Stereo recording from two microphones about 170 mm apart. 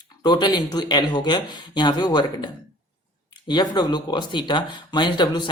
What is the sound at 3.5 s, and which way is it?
Speech, 25° left (ahead or behind).